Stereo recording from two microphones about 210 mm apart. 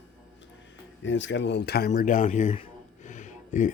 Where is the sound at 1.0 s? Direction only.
60° left (ahead or behind).